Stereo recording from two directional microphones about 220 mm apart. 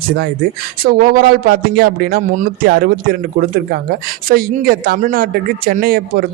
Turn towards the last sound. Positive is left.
turn(degrees=-40)  # may be behind; listen again after turning